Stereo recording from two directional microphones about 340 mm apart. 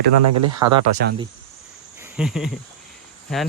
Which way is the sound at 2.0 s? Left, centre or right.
Centre.